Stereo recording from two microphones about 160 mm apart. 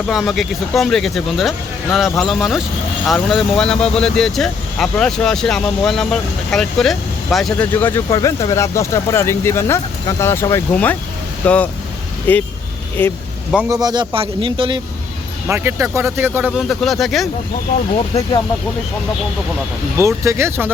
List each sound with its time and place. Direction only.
0.1 s speech: centre (ahead or behind)
7.7 s speech: 15° left (ahead or behind)
13.7 s speech: 25° right (ahead or behind)
15.4 s speech: 15° right (ahead or behind)
16.5 s speech: centre (ahead or behind)
20.0 s speech: 15° right (ahead or behind)